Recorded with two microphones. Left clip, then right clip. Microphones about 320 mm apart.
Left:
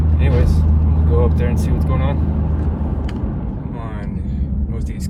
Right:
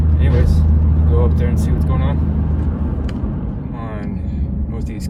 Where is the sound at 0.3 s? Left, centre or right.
Centre.